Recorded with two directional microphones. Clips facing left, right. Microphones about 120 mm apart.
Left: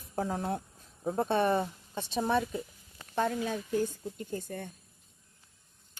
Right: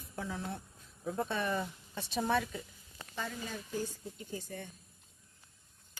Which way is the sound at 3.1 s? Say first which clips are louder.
Left 10 dB; 55° left (ahead or behind).